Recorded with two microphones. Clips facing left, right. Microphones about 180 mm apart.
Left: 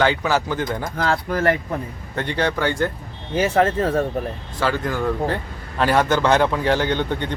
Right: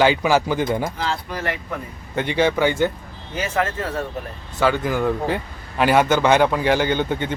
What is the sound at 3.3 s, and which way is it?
Speech, 35° left (ahead or behind).